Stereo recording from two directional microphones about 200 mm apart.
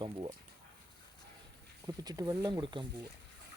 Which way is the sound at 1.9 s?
20° right (ahead or behind).